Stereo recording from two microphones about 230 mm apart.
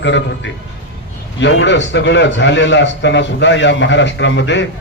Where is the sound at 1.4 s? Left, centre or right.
Left.